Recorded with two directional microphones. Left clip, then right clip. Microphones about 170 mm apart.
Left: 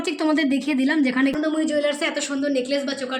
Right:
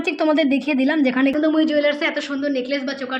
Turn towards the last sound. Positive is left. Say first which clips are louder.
# even
turn(degrees=10)  # may be behind; listen again after turning